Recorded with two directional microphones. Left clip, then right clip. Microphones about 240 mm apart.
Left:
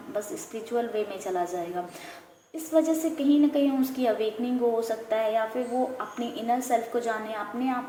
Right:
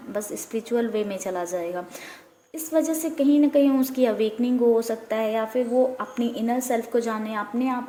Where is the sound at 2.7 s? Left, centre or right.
Right.